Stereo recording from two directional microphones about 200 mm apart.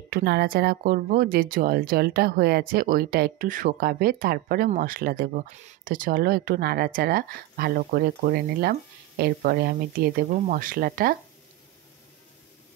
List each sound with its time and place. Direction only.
0.1 s speech: 55° right (ahead or behind)